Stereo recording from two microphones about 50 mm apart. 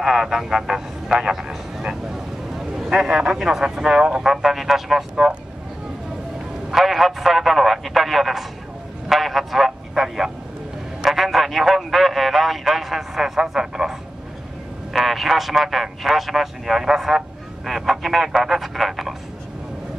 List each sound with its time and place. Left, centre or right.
0.0 s speech: centre
5.1 s speech: centre
6.7 s a sound: centre
9.1 s vehicle: centre
11.1 s a sound: centre
17.6 s telephone: centre